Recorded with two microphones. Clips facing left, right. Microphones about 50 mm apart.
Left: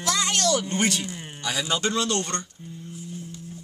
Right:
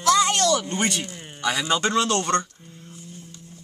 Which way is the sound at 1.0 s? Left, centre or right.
Centre.